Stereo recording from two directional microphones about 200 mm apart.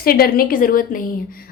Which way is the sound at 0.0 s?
50° left (ahead or behind).